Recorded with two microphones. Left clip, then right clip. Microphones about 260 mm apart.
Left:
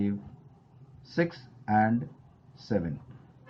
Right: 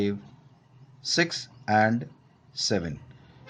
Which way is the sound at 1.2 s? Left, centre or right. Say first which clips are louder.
Right 3 dB; right.